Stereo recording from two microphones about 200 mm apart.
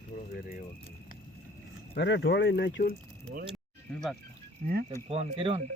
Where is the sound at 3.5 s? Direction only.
Centre (ahead or behind).